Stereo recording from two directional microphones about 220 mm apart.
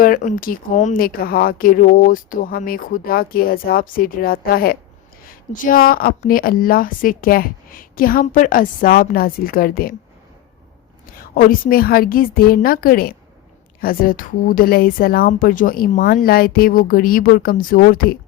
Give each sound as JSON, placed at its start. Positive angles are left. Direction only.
{"t": 0.0, "sound": "speech", "side_deg": 40}
{"t": 11.0, "sound": "speech", "side_deg": 40}